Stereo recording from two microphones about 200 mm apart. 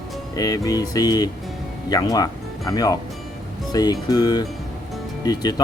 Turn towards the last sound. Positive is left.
turn(degrees=20)  # may be behind; listen again after turning